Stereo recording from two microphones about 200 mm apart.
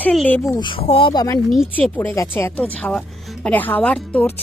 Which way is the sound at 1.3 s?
5° left (ahead or behind).